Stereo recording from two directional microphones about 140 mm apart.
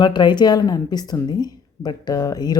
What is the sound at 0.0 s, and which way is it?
Speech, 30° left (ahead or behind).